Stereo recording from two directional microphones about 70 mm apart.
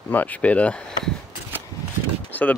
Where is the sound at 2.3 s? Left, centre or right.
Left.